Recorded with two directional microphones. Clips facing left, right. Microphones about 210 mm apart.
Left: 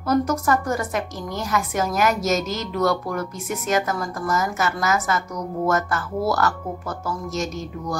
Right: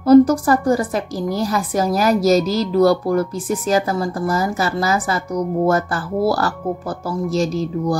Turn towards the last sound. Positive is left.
turn(degrees=-35)  # may be behind; listen again after turning